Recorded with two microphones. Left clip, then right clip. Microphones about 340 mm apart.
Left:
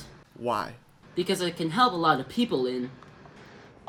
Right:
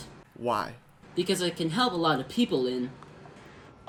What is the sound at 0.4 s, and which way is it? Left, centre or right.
Speech, centre.